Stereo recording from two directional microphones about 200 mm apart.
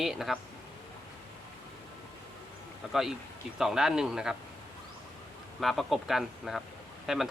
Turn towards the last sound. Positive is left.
turn(degrees=0)  # may be behind; listen again after turning